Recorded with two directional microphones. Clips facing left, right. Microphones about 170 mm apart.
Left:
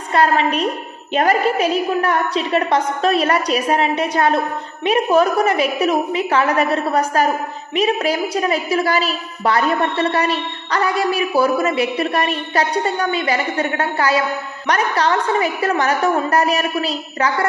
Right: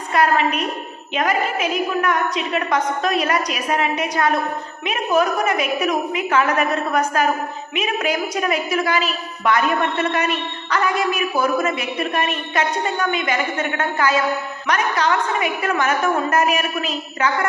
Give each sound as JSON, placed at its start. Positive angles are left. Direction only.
{"t": 0.1, "sound": "a woman's voice", "side_deg": 30}